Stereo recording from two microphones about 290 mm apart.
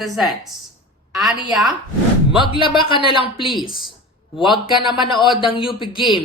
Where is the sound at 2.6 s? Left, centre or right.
Centre.